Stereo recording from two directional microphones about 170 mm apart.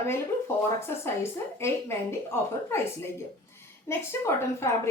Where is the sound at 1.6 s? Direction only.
15° left (ahead or behind).